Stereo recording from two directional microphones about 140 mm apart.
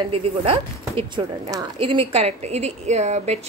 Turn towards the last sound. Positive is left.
turn(degrees=-50)  # may be behind; listen again after turning